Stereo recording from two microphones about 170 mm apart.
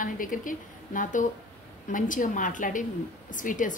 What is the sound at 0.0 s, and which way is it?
A woman's voice, 55° left (ahead or behind).